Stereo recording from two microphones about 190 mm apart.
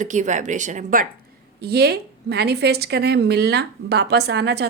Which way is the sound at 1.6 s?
55° right (ahead or behind).